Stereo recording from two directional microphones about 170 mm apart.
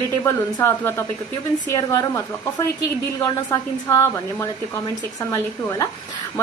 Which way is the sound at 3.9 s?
15° left (ahead or behind).